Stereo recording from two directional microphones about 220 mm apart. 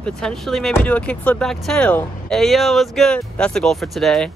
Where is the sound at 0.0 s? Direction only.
5° left (ahead or behind).